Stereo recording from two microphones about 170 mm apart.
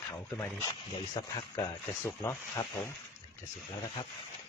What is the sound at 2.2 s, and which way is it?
Speech, 15° left (ahead or behind).